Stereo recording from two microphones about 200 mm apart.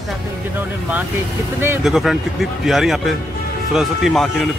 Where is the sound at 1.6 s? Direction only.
5° right (ahead or behind).